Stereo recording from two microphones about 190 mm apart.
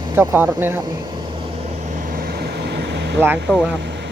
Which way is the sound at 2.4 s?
60° right (ahead or behind).